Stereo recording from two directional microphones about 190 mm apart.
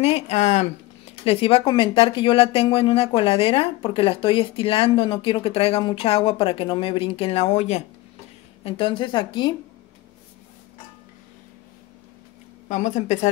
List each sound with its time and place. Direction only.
0.0 s speech: 35° left (ahead or behind)
12.6 s speech: 40° left (ahead or behind)